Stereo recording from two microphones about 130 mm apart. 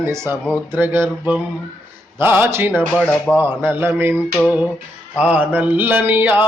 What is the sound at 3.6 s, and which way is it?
Speech, 15° right (ahead or behind).